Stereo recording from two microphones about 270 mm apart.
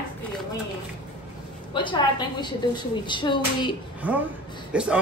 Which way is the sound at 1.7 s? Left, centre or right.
Centre.